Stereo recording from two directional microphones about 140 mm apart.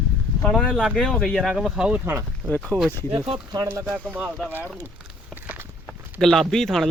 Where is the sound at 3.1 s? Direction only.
40° right (ahead or behind).